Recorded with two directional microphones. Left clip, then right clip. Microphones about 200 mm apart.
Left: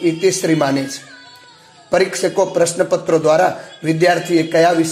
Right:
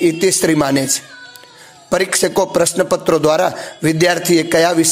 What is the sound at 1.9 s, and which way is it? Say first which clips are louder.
A man's voice: even; 30° right (ahead or behind).